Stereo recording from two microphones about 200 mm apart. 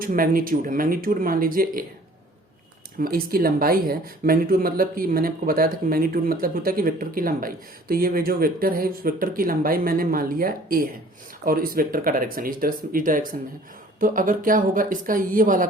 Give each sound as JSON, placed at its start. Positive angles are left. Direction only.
{"t": 0.0, "sound": "speech", "side_deg": -45}
{"t": 3.0, "sound": "speech", "side_deg": -45}